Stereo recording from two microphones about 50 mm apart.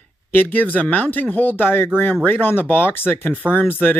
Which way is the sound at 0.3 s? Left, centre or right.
Left.